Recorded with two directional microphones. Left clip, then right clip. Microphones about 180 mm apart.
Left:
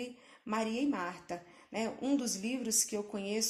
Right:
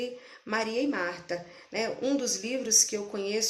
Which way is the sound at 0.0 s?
45° left (ahead or behind).